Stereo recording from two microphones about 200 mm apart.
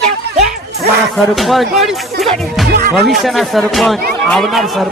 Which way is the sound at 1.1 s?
Centre (ahead or behind).